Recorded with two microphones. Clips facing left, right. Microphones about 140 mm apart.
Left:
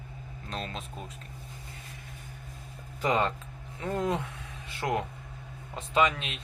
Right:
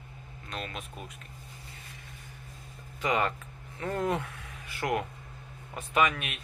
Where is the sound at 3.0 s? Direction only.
30° left (ahead or behind).